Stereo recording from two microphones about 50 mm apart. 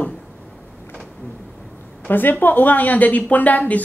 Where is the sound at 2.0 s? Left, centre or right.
Left.